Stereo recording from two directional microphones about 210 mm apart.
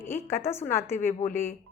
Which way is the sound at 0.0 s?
10° left (ahead or behind).